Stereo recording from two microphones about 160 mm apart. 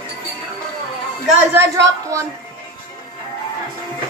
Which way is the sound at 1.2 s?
15° right (ahead or behind).